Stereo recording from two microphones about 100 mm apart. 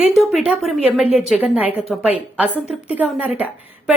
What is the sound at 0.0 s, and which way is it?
Speech, 5° right (ahead or behind).